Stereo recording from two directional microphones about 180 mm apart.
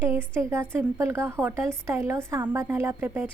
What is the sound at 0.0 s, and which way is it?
A woman's voice, 15° right (ahead or behind).